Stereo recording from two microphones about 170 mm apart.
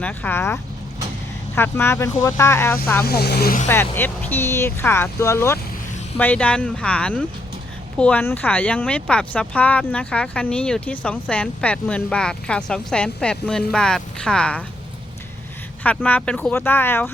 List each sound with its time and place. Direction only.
0.0 s speech: 10° left (ahead or behind)
3.0 s speech: 70° left (ahead or behind)
3.7 s speech: 15° left (ahead or behind)
15.8 s speech: 10° left (ahead or behind)